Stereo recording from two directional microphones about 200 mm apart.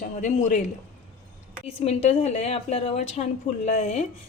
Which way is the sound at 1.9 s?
30° left (ahead or behind).